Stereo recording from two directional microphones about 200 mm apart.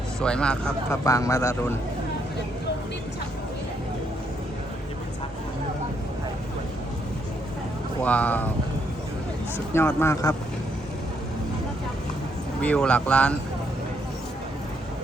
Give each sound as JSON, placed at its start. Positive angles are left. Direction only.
{"t": 0.2, "sound": "speech", "side_deg": 5}
{"t": 1.0, "sound": "speech", "side_deg": 15}
{"t": 8.0, "sound": "speech", "side_deg": 5}
{"t": 9.7, "sound": "speech", "side_deg": 10}
{"t": 12.6, "sound": "speech", "side_deg": 5}